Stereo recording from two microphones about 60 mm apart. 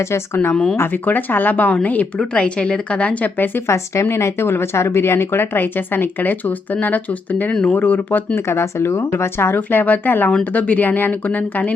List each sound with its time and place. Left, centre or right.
0.5 s speech: centre
0.8 s speech: left
4.0 s speech: left
8.4 s speech: left
9.6 s speech: left